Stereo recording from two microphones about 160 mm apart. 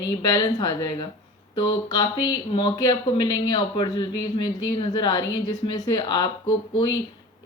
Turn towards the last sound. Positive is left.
turn(degrees=30)  # may be behind; listen again after turning